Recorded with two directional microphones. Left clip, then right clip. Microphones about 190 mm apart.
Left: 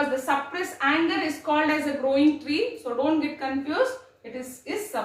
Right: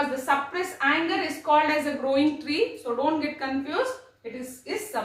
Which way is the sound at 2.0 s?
20° right (ahead or behind).